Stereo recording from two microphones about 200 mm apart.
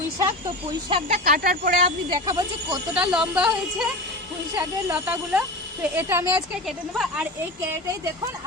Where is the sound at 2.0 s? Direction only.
20° right (ahead or behind).